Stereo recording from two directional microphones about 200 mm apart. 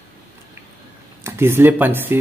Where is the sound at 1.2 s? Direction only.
10° right (ahead or behind).